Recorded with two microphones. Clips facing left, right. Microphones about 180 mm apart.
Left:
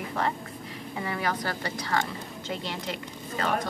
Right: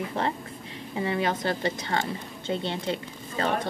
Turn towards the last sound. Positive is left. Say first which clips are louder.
# right 1 dB
turn(degrees=-30)  # may be behind; listen again after turning